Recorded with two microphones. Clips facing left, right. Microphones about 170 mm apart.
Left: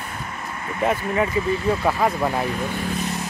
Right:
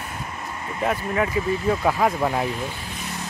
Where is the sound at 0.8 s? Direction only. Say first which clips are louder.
Left 2 dB; centre (ahead or behind).